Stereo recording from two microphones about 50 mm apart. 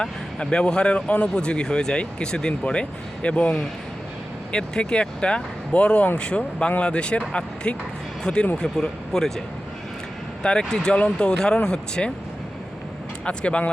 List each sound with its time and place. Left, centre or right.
0.0 s speech: centre
10.4 s speech: centre
13.2 s speech: left